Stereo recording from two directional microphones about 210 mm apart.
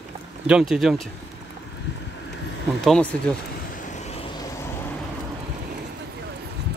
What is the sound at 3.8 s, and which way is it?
Vehicle, 35° left (ahead or behind).